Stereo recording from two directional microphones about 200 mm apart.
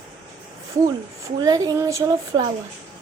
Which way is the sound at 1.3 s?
20° right (ahead or behind).